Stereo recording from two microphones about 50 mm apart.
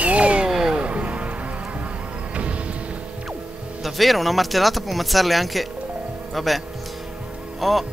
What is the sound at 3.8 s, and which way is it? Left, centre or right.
Speech, centre.